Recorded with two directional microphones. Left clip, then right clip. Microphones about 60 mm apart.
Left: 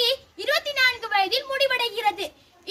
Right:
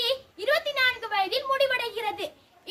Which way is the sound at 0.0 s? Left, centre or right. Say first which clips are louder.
Left 3 dB; right.